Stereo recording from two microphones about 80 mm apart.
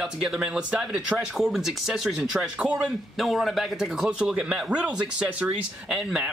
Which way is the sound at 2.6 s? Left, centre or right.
Centre.